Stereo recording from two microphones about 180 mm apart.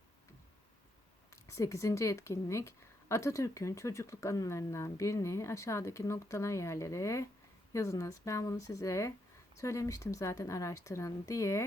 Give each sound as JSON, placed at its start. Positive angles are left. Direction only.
{"t": 1.5, "sound": "a woman's voice", "side_deg": 15}